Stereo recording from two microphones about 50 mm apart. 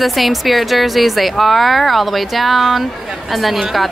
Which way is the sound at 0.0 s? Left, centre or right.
Centre.